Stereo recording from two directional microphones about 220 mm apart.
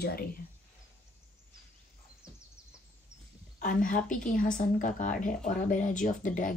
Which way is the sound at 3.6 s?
35° left (ahead or behind).